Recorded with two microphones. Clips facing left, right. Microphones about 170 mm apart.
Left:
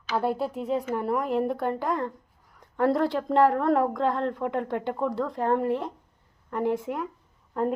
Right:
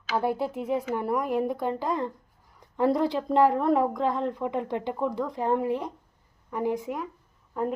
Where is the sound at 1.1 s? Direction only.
Centre (ahead or behind).